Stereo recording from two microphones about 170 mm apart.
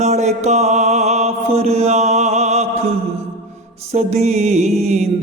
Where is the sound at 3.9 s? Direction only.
40° right (ahead or behind).